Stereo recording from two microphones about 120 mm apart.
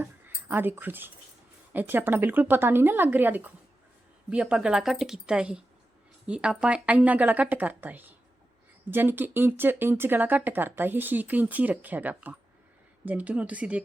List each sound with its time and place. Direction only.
0.0 s speech: 15° right (ahead or behind)